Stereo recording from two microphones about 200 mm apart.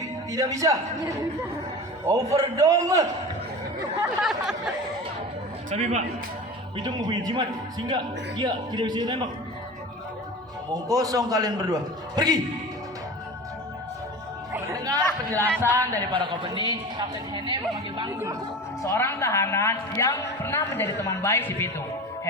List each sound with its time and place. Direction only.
0.3 s a man's voice: 15° right (ahead or behind)
4.2 s a sound: centre (ahead or behind)
5.7 s a man's voice: 35° right (ahead or behind)
6.7 s a man's voice: 20° right (ahead or behind)
10.8 s a man's voice: 20° right (ahead or behind)
14.5 s chatter: 15° right (ahead or behind)
15.6 s a man's voice: 10° right (ahead or behind)
18.8 s a woman's voice: 15° left (ahead or behind)